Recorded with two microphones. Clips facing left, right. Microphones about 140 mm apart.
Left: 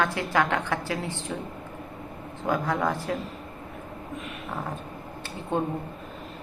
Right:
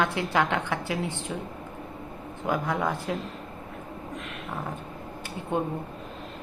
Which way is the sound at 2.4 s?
15° right (ahead or behind).